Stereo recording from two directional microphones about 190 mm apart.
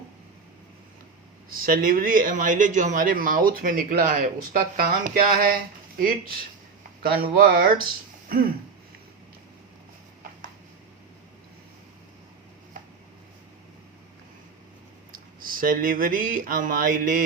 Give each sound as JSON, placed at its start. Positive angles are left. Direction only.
{"t": 1.5, "sound": "a man's voice", "side_deg": -50}
{"t": 15.1, "sound": "speech", "side_deg": -50}